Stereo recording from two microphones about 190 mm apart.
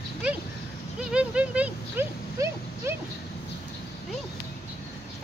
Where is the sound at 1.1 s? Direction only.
5° right (ahead or behind).